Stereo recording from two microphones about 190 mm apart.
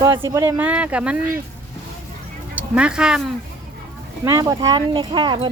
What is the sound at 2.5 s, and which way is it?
Speech, 5° right (ahead or behind).